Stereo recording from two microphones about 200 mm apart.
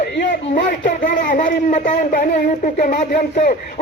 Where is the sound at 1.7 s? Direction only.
35° left (ahead or behind).